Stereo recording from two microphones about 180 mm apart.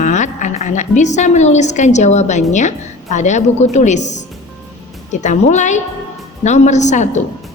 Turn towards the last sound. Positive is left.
turn(degrees=40)  # may be behind; listen again after turning